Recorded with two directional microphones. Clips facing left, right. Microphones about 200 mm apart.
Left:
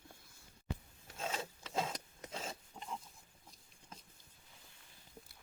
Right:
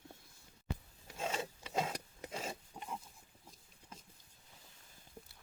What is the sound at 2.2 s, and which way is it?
Pig, 10° right (ahead or behind).